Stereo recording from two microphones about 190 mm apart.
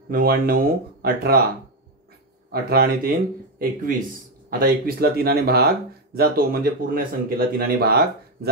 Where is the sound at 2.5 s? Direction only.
55° right (ahead or behind).